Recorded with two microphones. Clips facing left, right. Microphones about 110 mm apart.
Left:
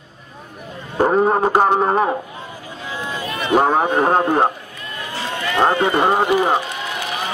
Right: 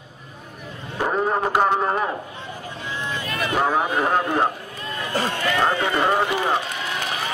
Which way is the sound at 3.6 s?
35° left (ahead or behind).